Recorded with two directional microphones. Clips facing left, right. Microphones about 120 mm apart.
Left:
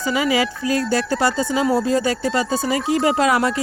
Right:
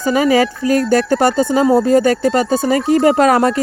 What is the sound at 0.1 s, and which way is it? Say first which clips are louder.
Speech: right 7 dB; 45° right (ahead or behind).